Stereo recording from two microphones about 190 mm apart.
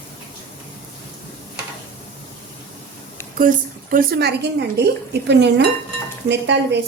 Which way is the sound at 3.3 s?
45° right (ahead or behind).